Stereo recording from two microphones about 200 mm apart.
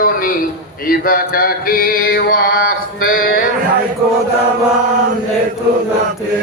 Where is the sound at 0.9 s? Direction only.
45° left (ahead or behind).